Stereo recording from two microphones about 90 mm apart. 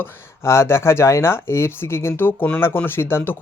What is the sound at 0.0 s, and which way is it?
Speech, 30° left (ahead or behind).